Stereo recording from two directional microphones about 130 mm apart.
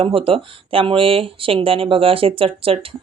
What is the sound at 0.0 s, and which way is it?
A woman's voice, 45° right (ahead or behind).